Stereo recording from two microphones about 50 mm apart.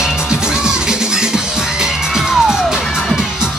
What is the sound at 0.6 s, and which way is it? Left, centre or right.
Music, centre.